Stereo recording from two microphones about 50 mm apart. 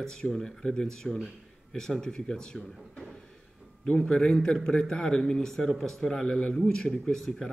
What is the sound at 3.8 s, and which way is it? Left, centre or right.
Speech, centre.